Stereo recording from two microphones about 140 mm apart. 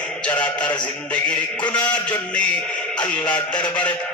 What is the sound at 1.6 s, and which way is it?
Speech, 35° left (ahead or behind).